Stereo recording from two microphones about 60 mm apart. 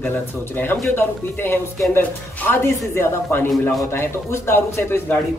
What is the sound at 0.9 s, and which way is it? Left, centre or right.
A man's voice, left.